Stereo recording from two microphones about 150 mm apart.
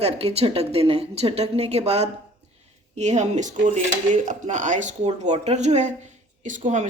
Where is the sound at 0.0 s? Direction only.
45° right (ahead or behind).